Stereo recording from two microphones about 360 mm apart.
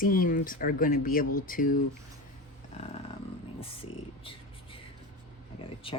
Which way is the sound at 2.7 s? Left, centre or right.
Centre.